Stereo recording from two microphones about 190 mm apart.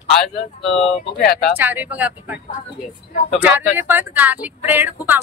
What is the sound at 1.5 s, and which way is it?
Speech, 10° right (ahead or behind).